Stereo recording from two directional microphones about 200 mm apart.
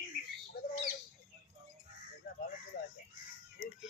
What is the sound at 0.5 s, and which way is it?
Squawk, 55° left (ahead or behind).